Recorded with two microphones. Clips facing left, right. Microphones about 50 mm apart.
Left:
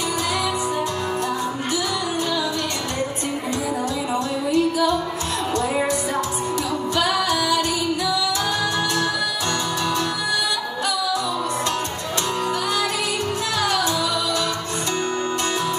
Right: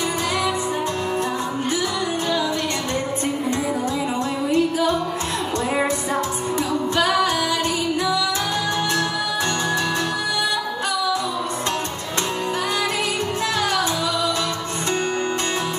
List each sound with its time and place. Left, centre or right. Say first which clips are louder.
4.5 s music: even; right
7.0 s music: right 1 dB; right